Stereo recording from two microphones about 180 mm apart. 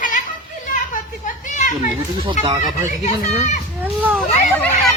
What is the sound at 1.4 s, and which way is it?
Children playing, 45° left (ahead or behind).